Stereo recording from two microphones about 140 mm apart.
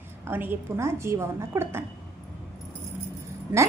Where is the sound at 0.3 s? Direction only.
15° right (ahead or behind).